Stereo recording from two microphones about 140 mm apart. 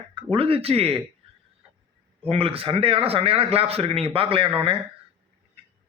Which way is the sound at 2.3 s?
45° right (ahead or behind).